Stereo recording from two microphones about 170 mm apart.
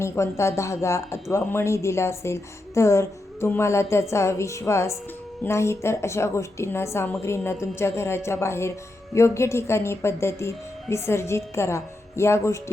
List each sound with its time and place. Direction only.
0.0 s speech: 15° left (ahead or behind)